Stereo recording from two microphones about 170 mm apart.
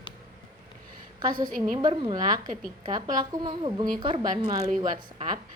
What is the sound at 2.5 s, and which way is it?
Speech, 50° right (ahead or behind).